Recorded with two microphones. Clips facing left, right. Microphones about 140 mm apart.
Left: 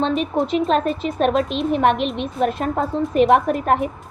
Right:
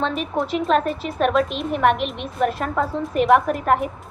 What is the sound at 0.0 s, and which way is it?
A woman's voice, 25° left (ahead or behind).